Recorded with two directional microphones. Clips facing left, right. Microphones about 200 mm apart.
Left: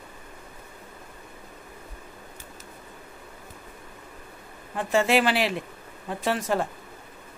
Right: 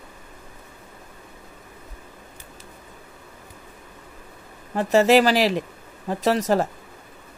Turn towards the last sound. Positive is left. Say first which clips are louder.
# right 5 dB
turn(degrees=-40)  # may be behind; listen again after turning